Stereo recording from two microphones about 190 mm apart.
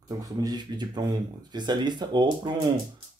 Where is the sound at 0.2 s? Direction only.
20° right (ahead or behind).